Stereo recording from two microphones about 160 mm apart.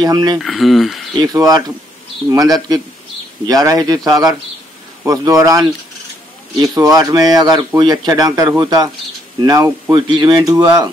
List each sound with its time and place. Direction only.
0.0 s speech: 25° right (ahead or behind)
0.4 s speech: centre (ahead or behind)
1.2 s speech: 25° right (ahead or behind)